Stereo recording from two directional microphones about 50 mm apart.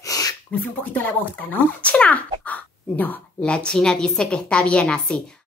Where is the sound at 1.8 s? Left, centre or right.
Left.